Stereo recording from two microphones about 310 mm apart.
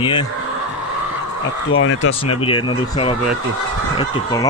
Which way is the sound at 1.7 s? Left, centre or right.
Left.